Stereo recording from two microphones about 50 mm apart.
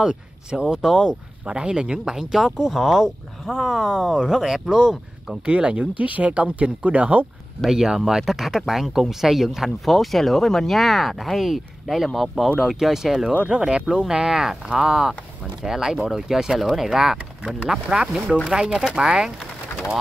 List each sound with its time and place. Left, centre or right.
0.0 s speech: centre
0.8 s speech: centre
1.5 s speech: centre
7.7 s speech: centre
13.3 s speech: right